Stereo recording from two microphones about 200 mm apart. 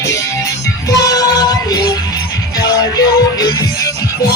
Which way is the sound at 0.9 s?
20° left (ahead or behind).